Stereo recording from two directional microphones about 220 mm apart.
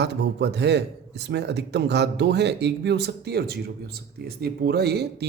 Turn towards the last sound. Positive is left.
turn(degrees=-45)  # may be behind; listen again after turning